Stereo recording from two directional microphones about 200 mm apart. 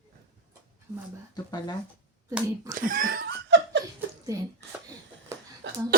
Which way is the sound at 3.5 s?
65° right (ahead or behind).